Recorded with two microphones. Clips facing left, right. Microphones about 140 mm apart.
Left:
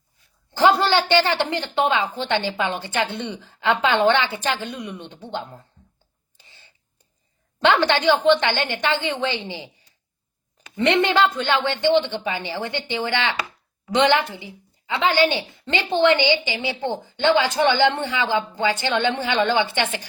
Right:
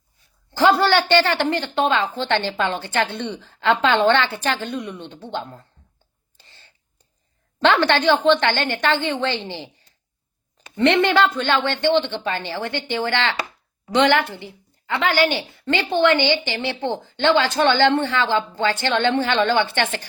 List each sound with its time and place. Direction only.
0.5 s a woman's voice: 20° left (ahead or behind)
6.3 s a sound: 15° left (ahead or behind)
7.6 s a woman's voice: 15° left (ahead or behind)
10.8 s a woman's voice: 15° left (ahead or behind)